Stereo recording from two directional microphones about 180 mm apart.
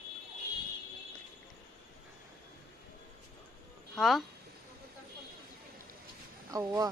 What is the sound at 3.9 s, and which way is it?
Speech, centre (ahead or behind).